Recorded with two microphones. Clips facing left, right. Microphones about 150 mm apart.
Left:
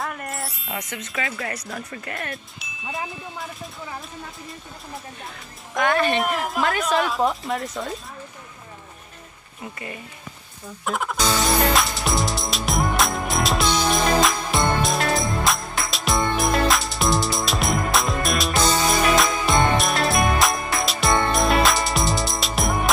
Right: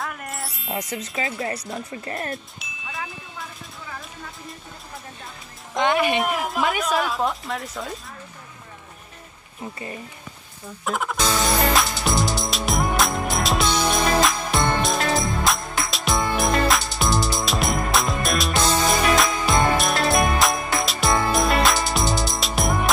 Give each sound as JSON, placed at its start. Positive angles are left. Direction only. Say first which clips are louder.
{"t": 0.0, "sound": "wind chime", "louder": "left 2 dB", "side_deg": 0}
{"t": 0.7, "sound": "speech", "louder": "right 4 dB", "side_deg": -35}
{"t": 1.1, "sound": "speech", "louder": "right 1 dB", "side_deg": -25}
{"t": 5.8, "sound": "speech", "louder": "even", "side_deg": -15}
{"t": 6.1, "sound": "speech", "louder": "even", "side_deg": 0}
{"t": 10.9, "sound": "music", "louder": "even", "side_deg": 0}